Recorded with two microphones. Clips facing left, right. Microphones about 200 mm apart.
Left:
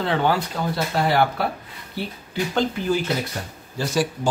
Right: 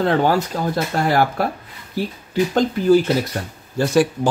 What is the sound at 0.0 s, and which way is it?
Speech, 45° right (ahead or behind).